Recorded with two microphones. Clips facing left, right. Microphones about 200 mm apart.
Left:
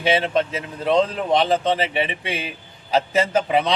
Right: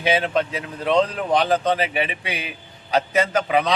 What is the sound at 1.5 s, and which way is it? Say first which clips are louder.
A man's voice: even; 25° left (ahead or behind).